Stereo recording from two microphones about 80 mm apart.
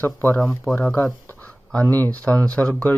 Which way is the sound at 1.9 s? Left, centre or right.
Centre.